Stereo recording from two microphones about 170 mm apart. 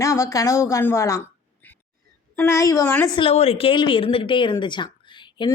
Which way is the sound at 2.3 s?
15° left (ahead or behind).